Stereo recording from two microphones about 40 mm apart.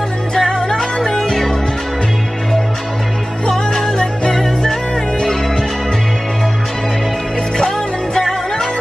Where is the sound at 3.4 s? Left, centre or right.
Centre.